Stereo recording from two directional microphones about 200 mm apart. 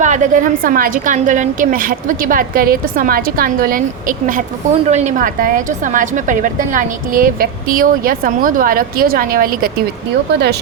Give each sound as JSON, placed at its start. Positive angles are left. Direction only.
{"t": 0.0, "sound": "a woman's voice", "side_deg": -40}